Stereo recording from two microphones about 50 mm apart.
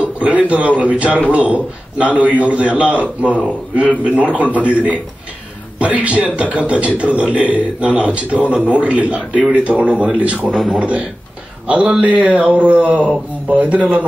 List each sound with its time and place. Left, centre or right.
0.0 s speech: right
10.5 s speech: centre
10.8 s a man's voice: right